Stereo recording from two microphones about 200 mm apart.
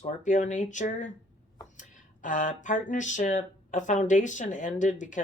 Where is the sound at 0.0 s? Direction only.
40° left (ahead or behind).